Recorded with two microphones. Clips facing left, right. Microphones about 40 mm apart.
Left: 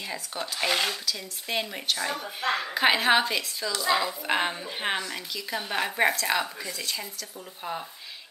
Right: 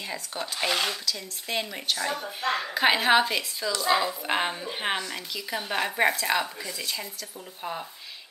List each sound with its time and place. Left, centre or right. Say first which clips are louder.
0.1 s speech: even; centre